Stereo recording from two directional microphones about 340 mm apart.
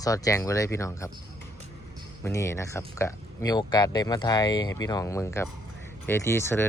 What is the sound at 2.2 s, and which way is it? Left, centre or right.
Speech, centre.